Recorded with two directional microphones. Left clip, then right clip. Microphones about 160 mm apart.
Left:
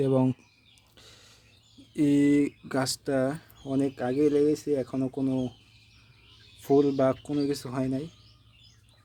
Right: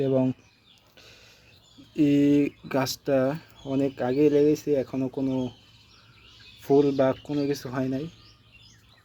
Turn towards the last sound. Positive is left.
turn(degrees=10)  # may be behind; listen again after turning